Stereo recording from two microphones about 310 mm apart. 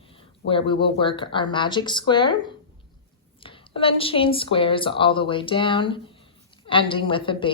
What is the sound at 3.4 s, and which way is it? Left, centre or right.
Speech, centre.